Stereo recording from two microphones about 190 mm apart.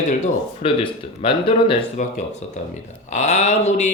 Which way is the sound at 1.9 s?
40° left (ahead or behind).